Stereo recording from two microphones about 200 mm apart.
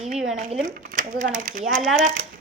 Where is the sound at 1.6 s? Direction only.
Centre (ahead or behind).